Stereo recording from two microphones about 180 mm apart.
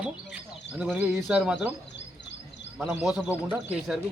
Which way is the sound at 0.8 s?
10° right (ahead or behind).